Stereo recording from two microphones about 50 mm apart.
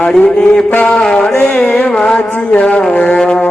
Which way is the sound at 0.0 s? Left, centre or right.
Left.